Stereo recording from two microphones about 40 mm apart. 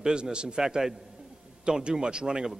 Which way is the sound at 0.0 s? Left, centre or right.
Right.